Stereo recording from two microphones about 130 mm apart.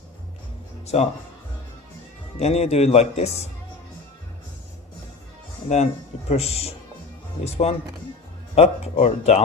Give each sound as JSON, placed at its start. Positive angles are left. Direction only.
{"t": 0.9, "sound": "speech", "side_deg": 55}
{"t": 2.4, "sound": "speech", "side_deg": 55}
{"t": 5.6, "sound": "speech", "side_deg": 60}